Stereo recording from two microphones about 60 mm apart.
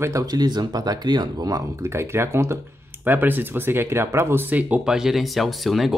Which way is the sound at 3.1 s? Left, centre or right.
Right.